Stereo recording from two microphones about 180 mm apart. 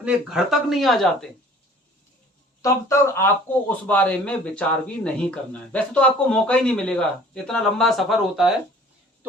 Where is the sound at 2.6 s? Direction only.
15° left (ahead or behind); by 8.5 s centre (ahead or behind).